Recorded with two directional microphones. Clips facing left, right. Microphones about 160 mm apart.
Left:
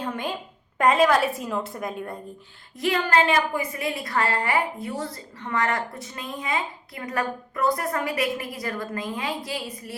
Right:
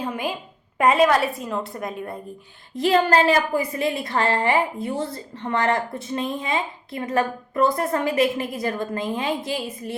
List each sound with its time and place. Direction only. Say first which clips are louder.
0.0 s a woman's voice: right 2 dB; 10° right (ahead or behind)
2.7 s a woman's voice: right 4 dB; 30° right (ahead or behind)